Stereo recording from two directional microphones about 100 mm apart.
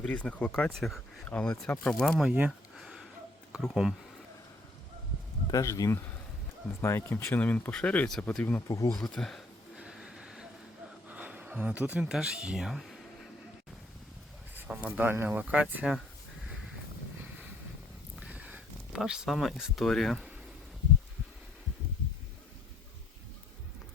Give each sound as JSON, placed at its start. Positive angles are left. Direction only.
{"t": 0.0, "sound": "speech", "side_deg": 10}
{"t": 2.2, "sound": "speech", "side_deg": -15}
{"t": 2.7, "sound": "a sound", "side_deg": -5}
{"t": 5.5, "sound": "speech", "side_deg": 35}
{"t": 7.3, "sound": "speech", "side_deg": 15}
{"t": 8.6, "sound": "speech", "side_deg": 35}
{"t": 8.9, "sound": "speech", "side_deg": 5}
{"t": 9.7, "sound": "train", "side_deg": -10}
{"t": 11.1, "sound": "speech", "side_deg": -15}
{"t": 14.8, "sound": "speech", "side_deg": -15}
{"t": 18.2, "sound": "a sound", "side_deg": -15}